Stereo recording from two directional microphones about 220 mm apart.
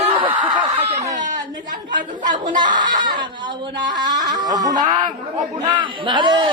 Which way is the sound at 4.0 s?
20° right (ahead or behind).